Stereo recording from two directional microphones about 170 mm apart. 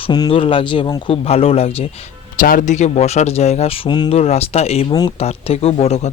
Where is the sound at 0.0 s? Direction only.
30° left (ahead or behind).